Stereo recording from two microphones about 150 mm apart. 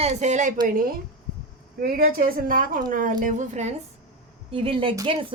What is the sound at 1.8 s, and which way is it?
Speech, 75° right (ahead or behind).